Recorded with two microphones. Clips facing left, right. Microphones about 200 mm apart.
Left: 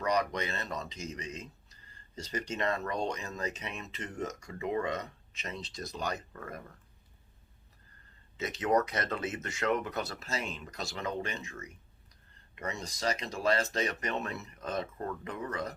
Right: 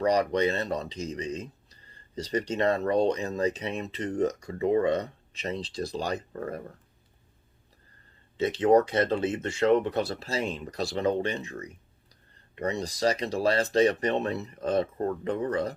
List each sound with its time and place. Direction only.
0.0 s speech: 35° right (ahead or behind)
8.4 s speech: 30° right (ahead or behind)